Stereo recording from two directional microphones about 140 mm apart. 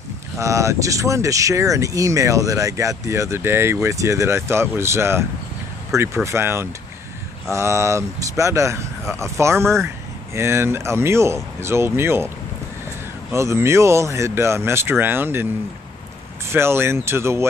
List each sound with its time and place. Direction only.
0.4 s speech: 20° right (ahead or behind)
13.3 s speech: 20° right (ahead or behind)
16.4 s speech: 15° right (ahead or behind)